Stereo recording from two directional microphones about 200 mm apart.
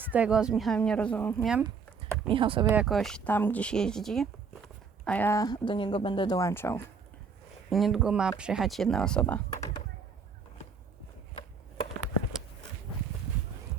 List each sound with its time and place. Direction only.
0.1 s speech: 5° right (ahead or behind)
1.6 s speech: 25° right (ahead or behind)
2.6 s speech: 5° right (ahead or behind); by 6.8 s 10° left (ahead or behind)
7.7 s speech: centre (ahead or behind)